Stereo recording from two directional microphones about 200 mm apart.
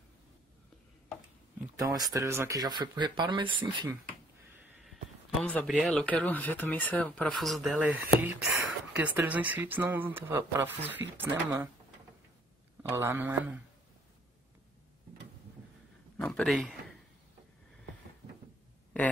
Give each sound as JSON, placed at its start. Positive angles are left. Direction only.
{"t": 1.8, "sound": "speech", "side_deg": -20}
{"t": 5.4, "sound": "speech", "side_deg": 5}
{"t": 12.9, "sound": "speech", "side_deg": -10}
{"t": 16.2, "sound": "a sound", "side_deg": 5}